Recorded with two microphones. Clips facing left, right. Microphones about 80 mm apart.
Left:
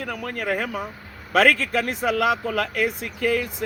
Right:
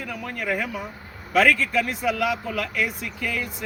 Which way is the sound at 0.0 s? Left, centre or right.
Left.